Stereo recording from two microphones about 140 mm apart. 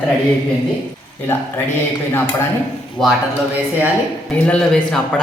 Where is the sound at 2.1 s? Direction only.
15° left (ahead or behind).